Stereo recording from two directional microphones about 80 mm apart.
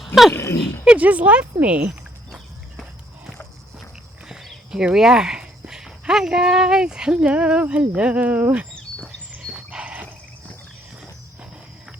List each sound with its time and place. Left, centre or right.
0.0 s speech: centre
0.9 s speech: centre
4.3 s speech: centre
9.4 s dog: centre